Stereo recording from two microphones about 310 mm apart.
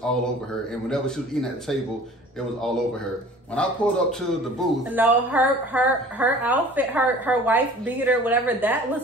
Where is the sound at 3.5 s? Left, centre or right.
Centre.